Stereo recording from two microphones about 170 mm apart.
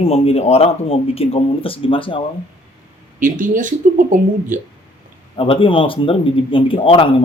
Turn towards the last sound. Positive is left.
turn(degrees=30)  # may be behind; listen again after turning